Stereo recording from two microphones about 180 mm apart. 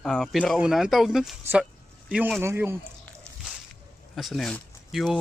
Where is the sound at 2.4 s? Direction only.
10° right (ahead or behind).